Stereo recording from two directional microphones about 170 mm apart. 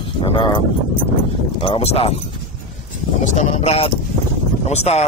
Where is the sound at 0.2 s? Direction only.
30° left (ahead or behind).